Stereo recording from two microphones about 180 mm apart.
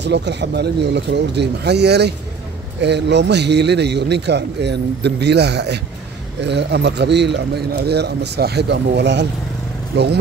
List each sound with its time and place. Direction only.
0.0 s a man's voice: 70° right (ahead or behind)